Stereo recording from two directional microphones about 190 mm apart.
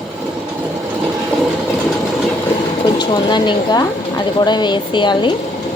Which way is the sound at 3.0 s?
25° left (ahead or behind).